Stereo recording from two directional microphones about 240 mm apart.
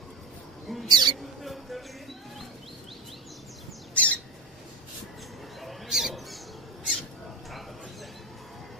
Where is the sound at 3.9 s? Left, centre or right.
Centre.